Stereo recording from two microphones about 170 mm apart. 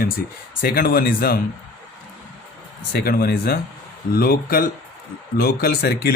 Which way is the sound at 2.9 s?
65° left (ahead or behind).